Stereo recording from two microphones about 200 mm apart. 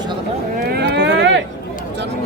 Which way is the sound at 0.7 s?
55° right (ahead or behind).